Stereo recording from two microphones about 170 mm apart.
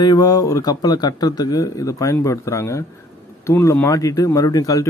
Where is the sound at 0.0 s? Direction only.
25° left (ahead or behind).